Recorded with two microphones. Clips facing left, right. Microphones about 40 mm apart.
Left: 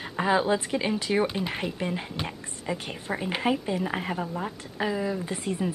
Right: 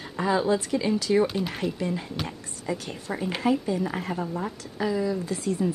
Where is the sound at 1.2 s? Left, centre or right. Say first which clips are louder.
Right 1 dB; centre.